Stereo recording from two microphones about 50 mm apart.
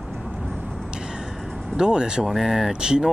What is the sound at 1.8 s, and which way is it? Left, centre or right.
Speech, centre.